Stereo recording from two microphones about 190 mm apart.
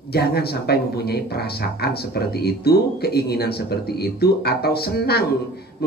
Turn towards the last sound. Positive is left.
turn(degrees=55)  # may be behind; listen again after turning